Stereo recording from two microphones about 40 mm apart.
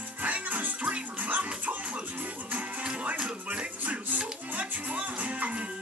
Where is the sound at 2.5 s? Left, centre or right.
Right.